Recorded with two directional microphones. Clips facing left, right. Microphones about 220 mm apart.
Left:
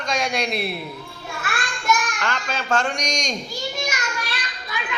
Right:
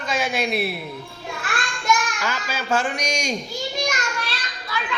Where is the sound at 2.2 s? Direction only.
5° right (ahead or behind).